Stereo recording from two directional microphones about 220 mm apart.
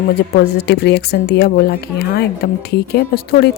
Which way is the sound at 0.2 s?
50° left (ahead or behind).